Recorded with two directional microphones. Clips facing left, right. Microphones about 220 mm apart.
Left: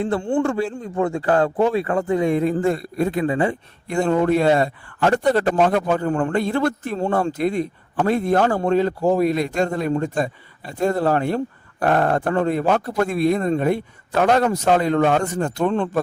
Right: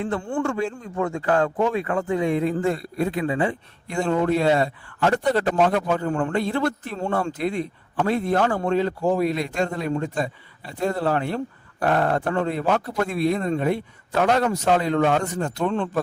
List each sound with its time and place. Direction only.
0.4 s a man's voice: 35° left (ahead or behind)